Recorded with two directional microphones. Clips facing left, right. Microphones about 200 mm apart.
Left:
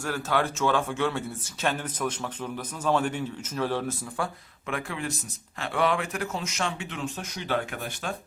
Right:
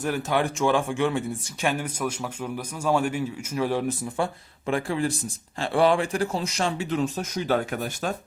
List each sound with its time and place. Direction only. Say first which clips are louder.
0.0 s speech: right 3 dB; 15° right (ahead or behind)
4.6 s speech: right 7 dB; 35° right (ahead or behind)